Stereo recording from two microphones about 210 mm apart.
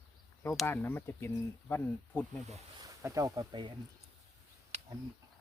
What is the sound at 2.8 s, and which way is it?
Speech, 15° right (ahead or behind).